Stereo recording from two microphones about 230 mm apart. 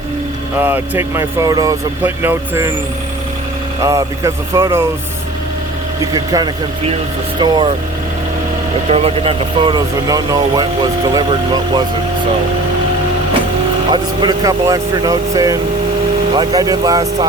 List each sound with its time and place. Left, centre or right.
0.6 s speech: centre
3.8 s speech: centre
6.1 s speech: centre
8.9 s speech: right
13.9 s speech: centre